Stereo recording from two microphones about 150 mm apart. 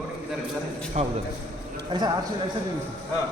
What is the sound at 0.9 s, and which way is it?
Speech, 50° right (ahead or behind).